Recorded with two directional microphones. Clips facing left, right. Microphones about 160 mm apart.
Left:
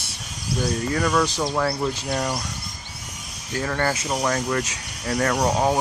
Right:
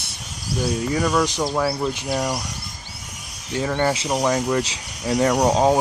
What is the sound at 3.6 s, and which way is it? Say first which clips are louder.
Speech: right 3 dB; 20° right (ahead or behind).